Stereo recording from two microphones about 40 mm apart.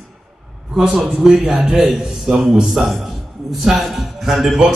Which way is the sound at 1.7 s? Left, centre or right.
Centre.